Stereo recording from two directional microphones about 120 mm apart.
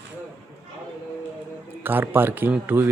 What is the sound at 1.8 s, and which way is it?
A man's voice, 15° right (ahead or behind).